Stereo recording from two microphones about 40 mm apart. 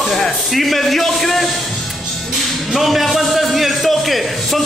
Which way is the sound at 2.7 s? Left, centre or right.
Centre.